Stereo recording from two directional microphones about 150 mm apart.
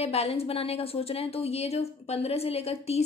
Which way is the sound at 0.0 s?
45° left (ahead or behind).